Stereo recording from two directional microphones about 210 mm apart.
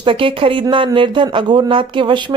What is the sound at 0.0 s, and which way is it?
Speech, 25° right (ahead or behind).